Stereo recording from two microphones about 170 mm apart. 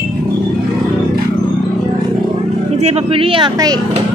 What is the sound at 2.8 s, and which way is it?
Speech, 40° right (ahead or behind).